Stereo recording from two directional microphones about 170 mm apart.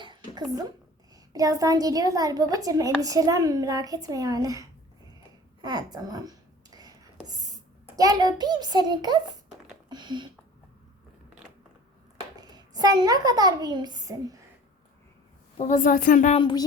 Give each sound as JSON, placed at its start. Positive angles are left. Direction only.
{"t": 0.0, "sound": "a sound", "side_deg": -25}
{"t": 1.3, "sound": "a child's voice", "side_deg": -20}
{"t": 5.6, "sound": "a sound", "side_deg": -25}
{"t": 7.9, "sound": "a child's voice", "side_deg": -20}
{"t": 12.4, "sound": "a child's voice", "side_deg": -25}
{"t": 15.5, "sound": "a woman's voice", "side_deg": 50}
{"t": 16.4, "sound": "speech", "side_deg": 25}